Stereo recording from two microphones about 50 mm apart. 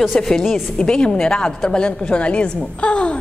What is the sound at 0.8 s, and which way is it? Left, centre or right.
A woman's voice, centre.